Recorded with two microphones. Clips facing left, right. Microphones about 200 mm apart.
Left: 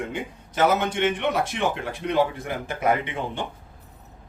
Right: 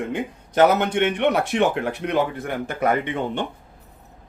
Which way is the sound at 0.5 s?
65° right (ahead or behind).